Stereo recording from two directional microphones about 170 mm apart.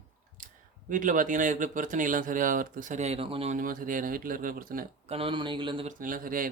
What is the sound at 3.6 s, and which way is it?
Speech, 55° right (ahead or behind).